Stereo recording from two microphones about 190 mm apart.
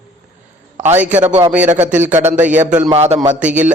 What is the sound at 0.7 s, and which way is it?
Speech, 35° right (ahead or behind).